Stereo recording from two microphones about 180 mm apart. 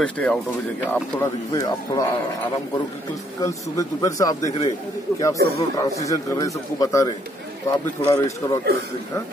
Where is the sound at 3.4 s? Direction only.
15° left (ahead or behind).